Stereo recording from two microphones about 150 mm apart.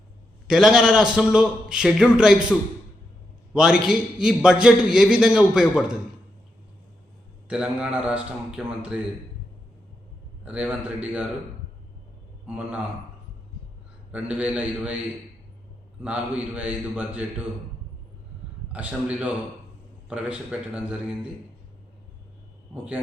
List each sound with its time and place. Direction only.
0.4 s a man's voice: 5° right (ahead or behind)
7.4 s a man's voice: 5° right (ahead or behind)
10.4 s a man's voice: 10° right (ahead or behind)
12.5 s a man's voice: 10° right (ahead or behind)
14.1 s a man's voice: 10° right (ahead or behind)
16.0 s a man's voice: 10° right (ahead or behind)
18.7 s a man's voice: 10° right (ahead or behind)